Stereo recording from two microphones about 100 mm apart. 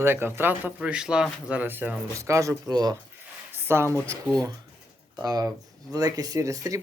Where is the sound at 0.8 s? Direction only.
10° right (ahead or behind).